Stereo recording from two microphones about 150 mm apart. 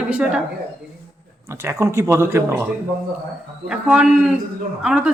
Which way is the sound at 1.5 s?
20° right (ahead or behind).